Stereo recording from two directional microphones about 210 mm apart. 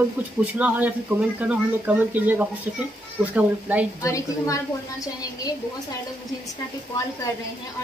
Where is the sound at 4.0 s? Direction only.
15° left (ahead or behind).